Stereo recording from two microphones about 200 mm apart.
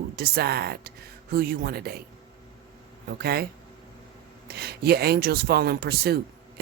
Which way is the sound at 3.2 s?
50° right (ahead or behind).